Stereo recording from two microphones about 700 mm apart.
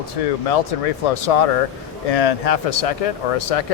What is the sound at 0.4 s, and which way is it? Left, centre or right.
Speech, left.